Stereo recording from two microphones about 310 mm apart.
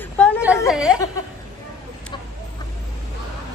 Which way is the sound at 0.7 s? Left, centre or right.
Centre.